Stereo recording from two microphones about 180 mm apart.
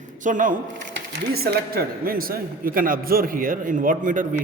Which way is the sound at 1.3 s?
60° right (ahead or behind).